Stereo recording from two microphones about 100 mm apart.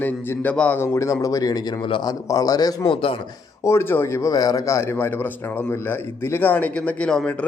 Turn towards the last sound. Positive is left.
turn(degrees=10)  # may be behind; listen again after turning